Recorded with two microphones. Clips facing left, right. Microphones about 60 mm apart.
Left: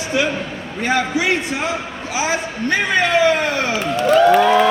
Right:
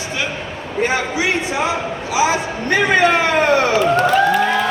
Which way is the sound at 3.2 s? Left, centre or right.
Right.